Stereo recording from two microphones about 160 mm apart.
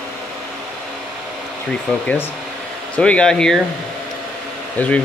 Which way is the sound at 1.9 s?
10° left (ahead or behind).